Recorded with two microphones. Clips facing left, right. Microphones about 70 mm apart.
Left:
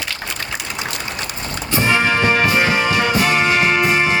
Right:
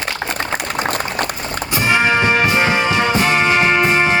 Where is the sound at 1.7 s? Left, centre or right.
Right.